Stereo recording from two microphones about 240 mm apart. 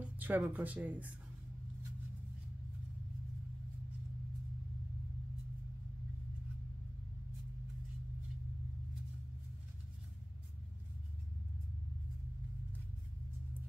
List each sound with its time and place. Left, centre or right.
0.0 s speech: centre